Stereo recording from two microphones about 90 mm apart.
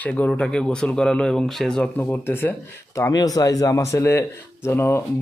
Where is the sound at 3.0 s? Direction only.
40° left (ahead or behind).